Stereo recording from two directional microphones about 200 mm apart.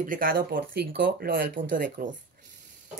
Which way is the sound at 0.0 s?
45° right (ahead or behind).